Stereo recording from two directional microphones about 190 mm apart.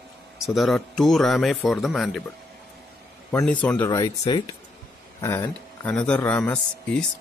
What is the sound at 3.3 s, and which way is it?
Speech, 5° left (ahead or behind).